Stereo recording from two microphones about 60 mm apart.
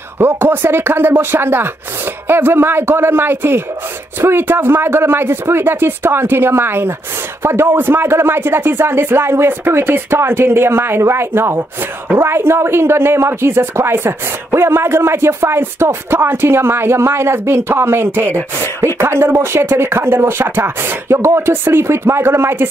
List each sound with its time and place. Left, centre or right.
0.2 s speech: right